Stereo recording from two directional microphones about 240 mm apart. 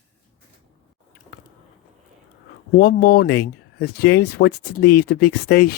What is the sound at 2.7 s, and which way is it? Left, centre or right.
Speech, left.